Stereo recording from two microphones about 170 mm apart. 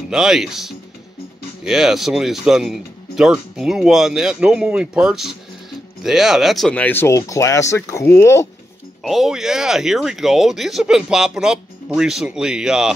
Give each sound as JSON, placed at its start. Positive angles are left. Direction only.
{"t": 0.1, "sound": "speech", "side_deg": -5}
{"t": 9.0, "sound": "speech", "side_deg": 0}